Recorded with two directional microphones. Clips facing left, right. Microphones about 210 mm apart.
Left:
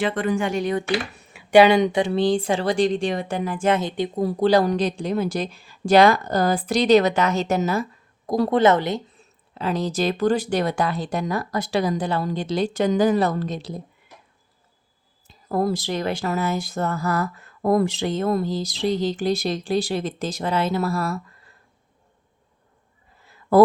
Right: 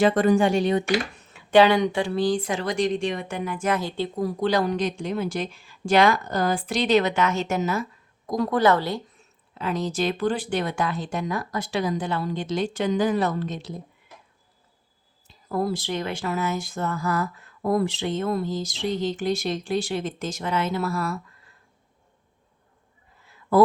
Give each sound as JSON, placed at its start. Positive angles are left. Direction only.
{"t": 0.0, "sound": "speech", "side_deg": -40}
{"t": 1.1, "sound": "speech", "side_deg": 10}
{"t": 4.2, "sound": "speech", "side_deg": 30}
{"t": 9.1, "sound": "speech", "side_deg": 35}
{"t": 15.4, "sound": "speech", "side_deg": 45}